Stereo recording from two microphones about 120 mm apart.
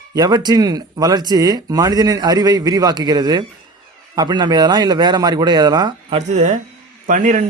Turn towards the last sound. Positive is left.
turn(degrees=-90)